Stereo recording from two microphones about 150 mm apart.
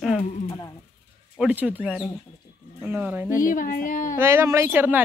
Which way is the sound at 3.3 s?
65° left (ahead or behind).